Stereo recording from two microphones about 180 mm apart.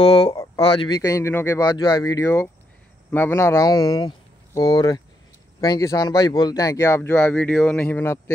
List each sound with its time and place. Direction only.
0.0 s speech: 35° left (ahead or behind); by 8.2 s 10° left (ahead or behind)